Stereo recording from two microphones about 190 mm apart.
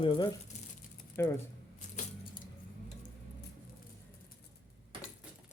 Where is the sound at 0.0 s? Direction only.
25° left (ahead or behind).